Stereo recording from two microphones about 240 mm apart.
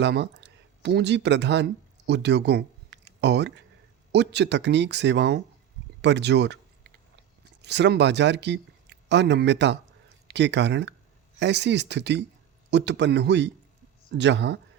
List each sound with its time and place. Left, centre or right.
0.0 s speech: right
7.6 s speech: right